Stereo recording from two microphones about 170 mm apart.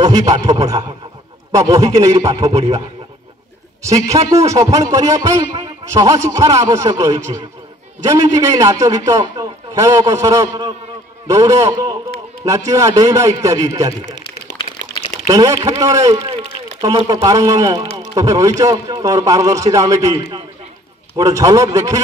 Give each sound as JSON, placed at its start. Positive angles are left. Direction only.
{"t": 0.0, "sound": "a man's voice", "side_deg": -20}
{"t": 3.8, "sound": "a man's voice", "side_deg": -20}
{"t": 14.7, "sound": "a sound", "side_deg": 50}
{"t": 15.2, "sound": "a man's voice", "side_deg": -20}
{"t": 16.3, "sound": "a sound", "side_deg": -25}
{"t": 17.1, "sound": "a man's voice", "side_deg": -20}
{"t": 21.2, "sound": "a man's voice", "side_deg": -20}